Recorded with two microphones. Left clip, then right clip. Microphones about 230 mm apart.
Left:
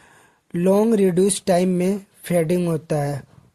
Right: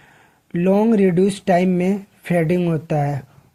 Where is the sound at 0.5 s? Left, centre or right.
Left.